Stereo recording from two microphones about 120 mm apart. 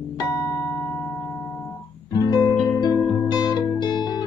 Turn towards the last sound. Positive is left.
turn(degrees=35)  # may be behind; listen again after turning